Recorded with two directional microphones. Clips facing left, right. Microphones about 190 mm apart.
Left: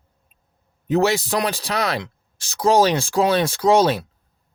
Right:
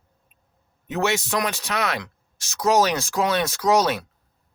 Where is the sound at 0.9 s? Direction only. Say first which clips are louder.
Left 5 dB; 35° left (ahead or behind).